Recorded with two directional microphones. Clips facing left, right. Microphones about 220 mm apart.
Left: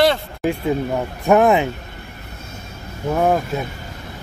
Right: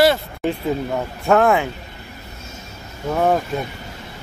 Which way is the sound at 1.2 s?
15° left (ahead or behind).